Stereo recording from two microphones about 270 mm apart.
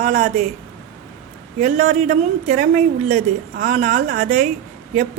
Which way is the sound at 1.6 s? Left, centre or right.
Right.